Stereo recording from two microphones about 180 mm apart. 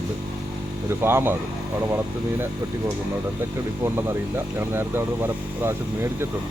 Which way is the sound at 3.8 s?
10° right (ahead or behind).